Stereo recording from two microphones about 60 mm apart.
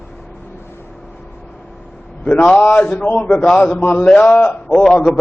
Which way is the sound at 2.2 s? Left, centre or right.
Left.